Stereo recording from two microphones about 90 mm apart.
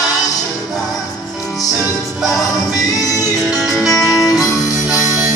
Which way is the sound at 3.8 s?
Centre (ahead or behind).